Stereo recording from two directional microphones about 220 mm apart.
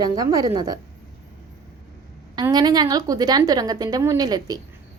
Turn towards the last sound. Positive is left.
turn(degrees=-15)  # may be behind; listen again after turning